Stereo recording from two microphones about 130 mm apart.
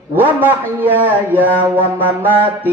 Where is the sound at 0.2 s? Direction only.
15° right (ahead or behind).